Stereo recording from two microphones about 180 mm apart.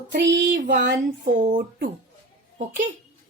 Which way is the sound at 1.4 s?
50° right (ahead or behind).